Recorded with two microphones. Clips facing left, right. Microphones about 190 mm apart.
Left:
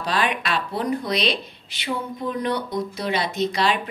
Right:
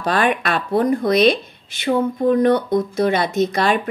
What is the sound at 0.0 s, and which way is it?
Speech, 50° right (ahead or behind).